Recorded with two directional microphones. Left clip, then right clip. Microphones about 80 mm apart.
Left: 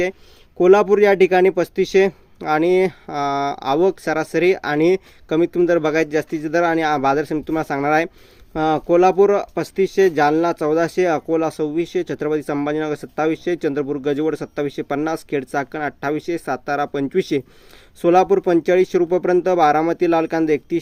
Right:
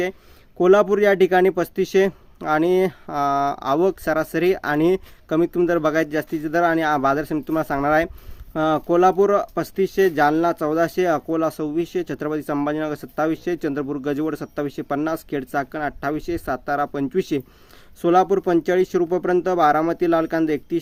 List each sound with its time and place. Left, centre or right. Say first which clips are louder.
0.6 s speech: left 3 dB; centre